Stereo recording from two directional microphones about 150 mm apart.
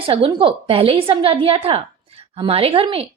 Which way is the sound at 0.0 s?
40° right (ahead or behind).